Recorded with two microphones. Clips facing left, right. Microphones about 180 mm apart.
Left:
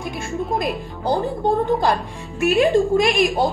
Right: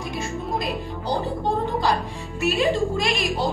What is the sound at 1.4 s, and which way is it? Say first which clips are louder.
A woman's voice: left 5 dB; 55° left (ahead or behind).